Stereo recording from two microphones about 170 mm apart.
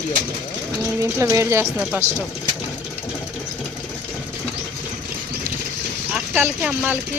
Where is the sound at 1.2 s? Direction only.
15° right (ahead or behind).